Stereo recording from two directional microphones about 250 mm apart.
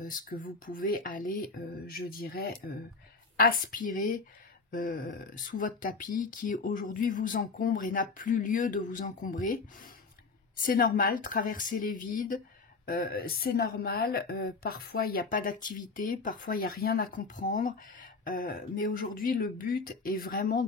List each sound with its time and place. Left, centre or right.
0.0 s a woman's voice: left
10.6 s a woman's voice: left